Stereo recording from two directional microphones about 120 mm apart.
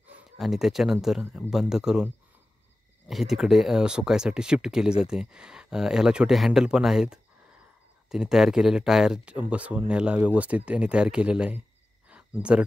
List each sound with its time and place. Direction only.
0.4 s speech: centre (ahead or behind)
3.1 s speech: centre (ahead or behind)
12.1 s a sound: 10° right (ahead or behind)